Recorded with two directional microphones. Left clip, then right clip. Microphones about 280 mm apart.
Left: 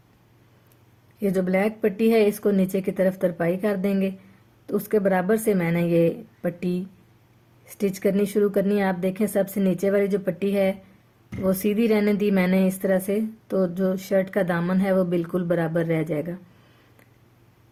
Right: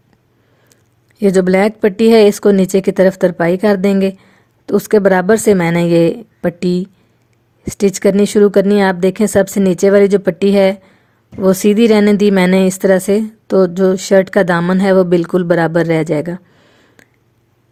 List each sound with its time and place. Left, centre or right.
1.2 s speech: right